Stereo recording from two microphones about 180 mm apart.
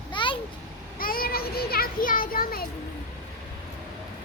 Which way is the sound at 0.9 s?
55° left (ahead or behind).